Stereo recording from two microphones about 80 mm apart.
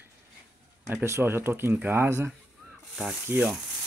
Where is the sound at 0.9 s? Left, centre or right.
Right.